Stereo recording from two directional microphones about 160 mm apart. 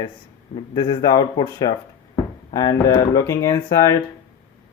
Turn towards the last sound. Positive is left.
turn(degrees=20)  # may be behind; listen again after turning